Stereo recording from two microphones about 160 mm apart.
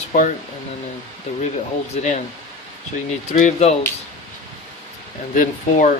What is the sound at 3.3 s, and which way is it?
Speech, 45° left (ahead or behind).